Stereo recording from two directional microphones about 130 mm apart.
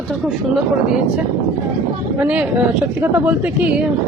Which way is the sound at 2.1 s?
10° right (ahead or behind).